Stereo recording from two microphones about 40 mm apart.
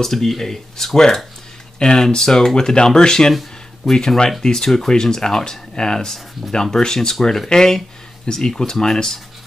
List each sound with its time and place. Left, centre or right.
0.0 s speech: centre